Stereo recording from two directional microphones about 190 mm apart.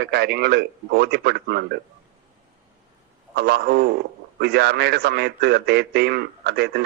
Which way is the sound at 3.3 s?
55° right (ahead or behind).